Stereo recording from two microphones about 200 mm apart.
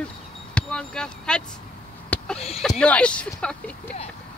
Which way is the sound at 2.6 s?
5° left (ahead or behind).